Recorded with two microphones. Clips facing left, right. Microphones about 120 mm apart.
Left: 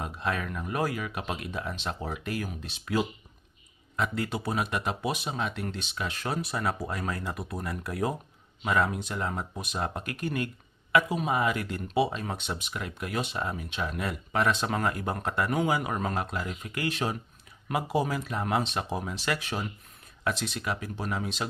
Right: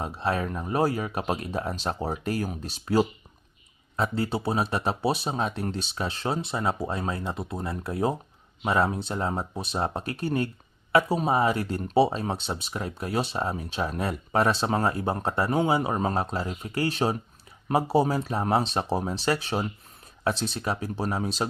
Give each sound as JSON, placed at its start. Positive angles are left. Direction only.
{"t": 0.0, "sound": "speech", "side_deg": -35}